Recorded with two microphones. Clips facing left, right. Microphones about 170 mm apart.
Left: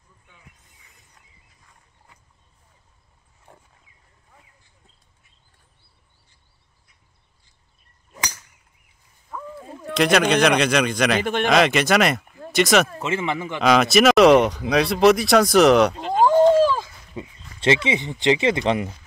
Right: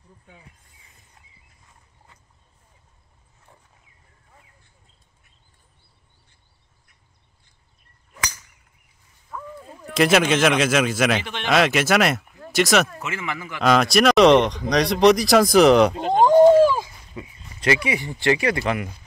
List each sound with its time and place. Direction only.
1.2 s a sound: 25° right (ahead or behind)
9.3 s speech: centre (ahead or behind)
11.2 s speech: 50° left (ahead or behind)
11.5 s speech: 5° right (ahead or behind)
12.9 s speech: 30° left (ahead or behind)
13.6 s speech: centre (ahead or behind)
16.3 s a sound: 15° right (ahead or behind)
17.1 s speech: 25° left (ahead or behind)